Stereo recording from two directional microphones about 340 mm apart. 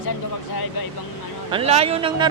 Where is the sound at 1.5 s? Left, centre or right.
Centre.